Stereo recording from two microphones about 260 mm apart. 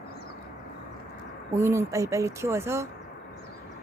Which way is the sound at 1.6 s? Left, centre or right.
Centre.